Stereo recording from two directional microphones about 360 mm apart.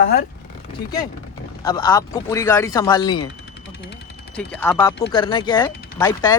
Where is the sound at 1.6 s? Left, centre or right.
Centre.